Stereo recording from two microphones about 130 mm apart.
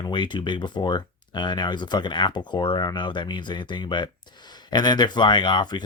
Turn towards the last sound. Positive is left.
turn(degrees=35)  # may be behind; listen again after turning